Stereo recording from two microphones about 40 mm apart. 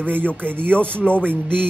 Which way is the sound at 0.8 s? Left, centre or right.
Left.